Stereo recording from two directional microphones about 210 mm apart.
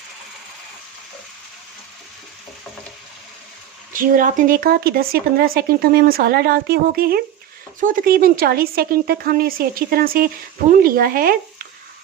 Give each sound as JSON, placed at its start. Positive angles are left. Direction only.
{"t": 3.9, "sound": "speech", "side_deg": -40}